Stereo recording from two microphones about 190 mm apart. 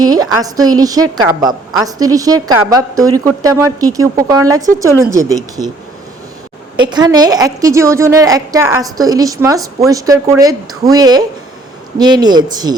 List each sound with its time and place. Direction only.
0.0 s a woman's voice: 20° right (ahead or behind)
6.7 s a woman's voice: 20° right (ahead or behind)